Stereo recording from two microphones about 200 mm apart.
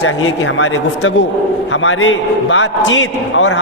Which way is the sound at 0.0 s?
80° left.